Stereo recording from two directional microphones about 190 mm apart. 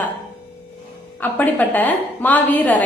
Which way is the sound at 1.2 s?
10° left (ahead or behind).